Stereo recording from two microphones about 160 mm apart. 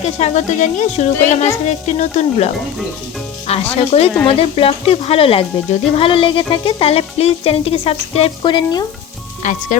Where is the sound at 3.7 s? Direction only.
40° left (ahead or behind).